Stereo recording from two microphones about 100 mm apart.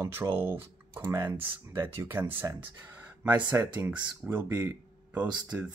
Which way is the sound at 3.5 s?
15° right (ahead or behind).